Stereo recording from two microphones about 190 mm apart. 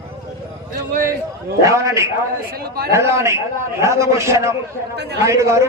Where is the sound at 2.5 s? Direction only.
55° right (ahead or behind).